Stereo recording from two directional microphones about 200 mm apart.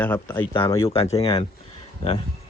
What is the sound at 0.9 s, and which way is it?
Speech, 30° left (ahead or behind).